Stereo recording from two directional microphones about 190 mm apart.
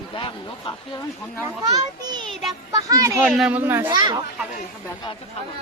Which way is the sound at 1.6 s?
20° right (ahead or behind).